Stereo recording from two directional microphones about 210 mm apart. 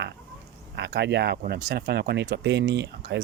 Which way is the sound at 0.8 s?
55° right (ahead or behind).